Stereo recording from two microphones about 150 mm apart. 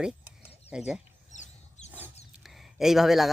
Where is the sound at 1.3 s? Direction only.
55° left (ahead or behind).